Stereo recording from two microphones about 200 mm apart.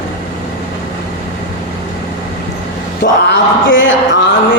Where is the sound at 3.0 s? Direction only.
65° left (ahead or behind).